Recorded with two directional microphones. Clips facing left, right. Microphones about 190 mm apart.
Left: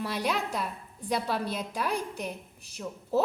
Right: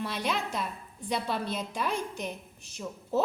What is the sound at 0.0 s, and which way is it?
A woman's voice, 10° left (ahead or behind).